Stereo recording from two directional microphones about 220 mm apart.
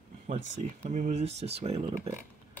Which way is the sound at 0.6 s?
35° right (ahead or behind).